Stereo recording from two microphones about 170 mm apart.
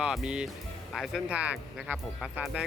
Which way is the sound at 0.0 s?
5° right (ahead or behind).